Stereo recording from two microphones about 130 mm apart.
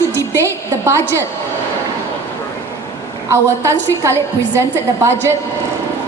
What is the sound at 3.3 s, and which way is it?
Speech, 20° right (ahead or behind).